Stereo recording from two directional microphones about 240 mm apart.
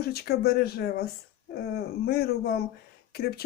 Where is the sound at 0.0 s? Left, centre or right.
Left.